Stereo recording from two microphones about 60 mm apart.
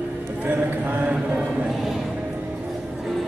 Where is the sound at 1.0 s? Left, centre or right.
Centre.